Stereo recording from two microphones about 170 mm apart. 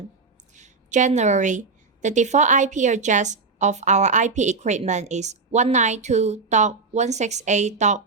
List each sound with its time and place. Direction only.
0.5 s a woman's voice: 45° right (ahead or behind)